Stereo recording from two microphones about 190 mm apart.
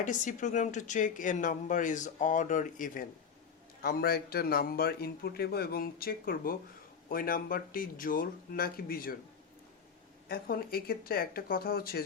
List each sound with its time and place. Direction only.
0.0 s a man's voice: 40° left (ahead or behind)
10.2 s a man's voice: 50° left (ahead or behind)